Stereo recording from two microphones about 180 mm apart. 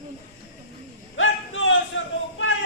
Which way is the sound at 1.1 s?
90° left.